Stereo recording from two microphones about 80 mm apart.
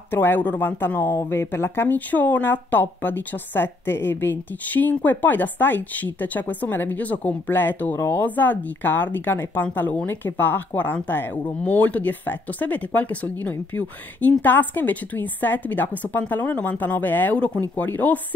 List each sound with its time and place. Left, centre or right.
0.1 s speech: left